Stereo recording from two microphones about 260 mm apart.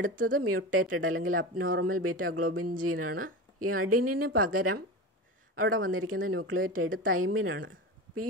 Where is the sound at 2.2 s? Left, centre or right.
Right.